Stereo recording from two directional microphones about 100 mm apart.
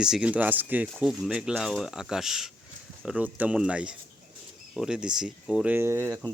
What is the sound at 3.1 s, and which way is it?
Speech, 15° right (ahead or behind).